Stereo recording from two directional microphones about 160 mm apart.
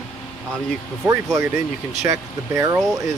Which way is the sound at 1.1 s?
20° right (ahead or behind).